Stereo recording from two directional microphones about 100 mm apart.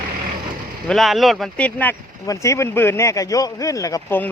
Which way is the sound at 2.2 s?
30° left (ahead or behind).